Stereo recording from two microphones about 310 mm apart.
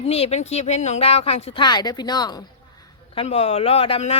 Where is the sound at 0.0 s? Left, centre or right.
Centre.